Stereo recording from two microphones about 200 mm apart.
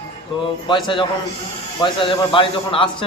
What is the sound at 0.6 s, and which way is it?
A man's voice, 25° left (ahead or behind).